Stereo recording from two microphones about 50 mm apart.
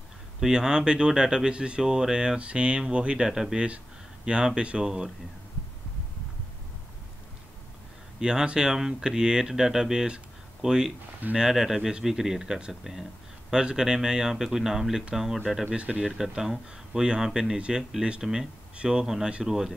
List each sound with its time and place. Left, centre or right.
0.4 s speech: centre
3.3 s speech: centre
3.5 s speech: right
8.2 s speech: centre
15.6 s speech: right